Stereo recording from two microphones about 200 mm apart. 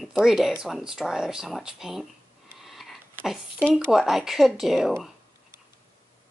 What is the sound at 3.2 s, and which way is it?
Speech, centre (ahead or behind).